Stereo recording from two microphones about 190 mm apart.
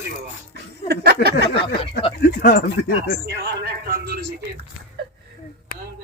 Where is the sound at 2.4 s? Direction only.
55° left (ahead or behind).